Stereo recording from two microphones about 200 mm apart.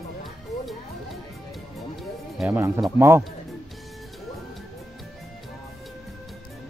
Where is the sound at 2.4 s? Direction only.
10° right (ahead or behind).